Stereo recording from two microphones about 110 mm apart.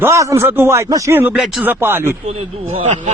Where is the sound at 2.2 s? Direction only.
85° right.